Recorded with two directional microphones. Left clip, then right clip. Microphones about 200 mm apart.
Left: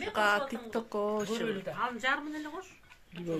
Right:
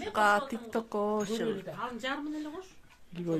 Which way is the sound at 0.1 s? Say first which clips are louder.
Right 2 dB; 25° right (ahead or behind).